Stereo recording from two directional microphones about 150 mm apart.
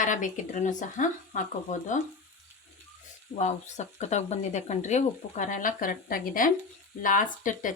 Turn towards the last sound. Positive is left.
turn(degrees=60)  # may be behind; listen again after turning